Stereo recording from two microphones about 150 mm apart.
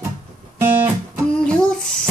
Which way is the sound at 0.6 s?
15° right (ahead or behind).